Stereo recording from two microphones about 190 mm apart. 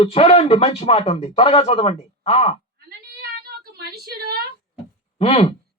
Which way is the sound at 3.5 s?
55° right (ahead or behind).